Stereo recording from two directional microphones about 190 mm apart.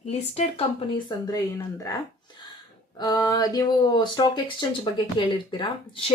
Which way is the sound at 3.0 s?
20° left (ahead or behind).